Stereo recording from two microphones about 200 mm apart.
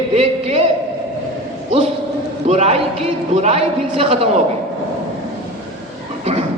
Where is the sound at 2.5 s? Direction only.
30° right (ahead or behind).